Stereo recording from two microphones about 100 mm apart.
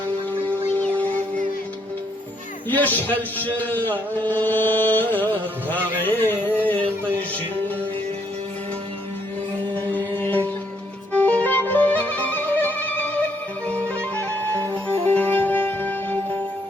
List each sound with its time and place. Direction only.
0.4 s a sound: 15° left (ahead or behind)
2.6 s a man's voice: 20° left (ahead or behind)
6.0 s music: 20° left (ahead or behind)
9.7 s music: 15° left (ahead or behind)